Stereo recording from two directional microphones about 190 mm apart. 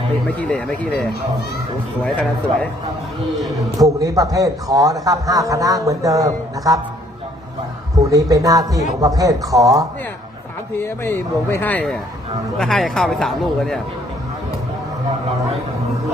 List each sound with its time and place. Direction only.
0.3 s speech: 5° left (ahead or behind)
3.8 s a man's voice: 20° right (ahead or behind)
7.9 s a man's voice: 20° right (ahead or behind)
10.8 s speech: 15° left (ahead or behind)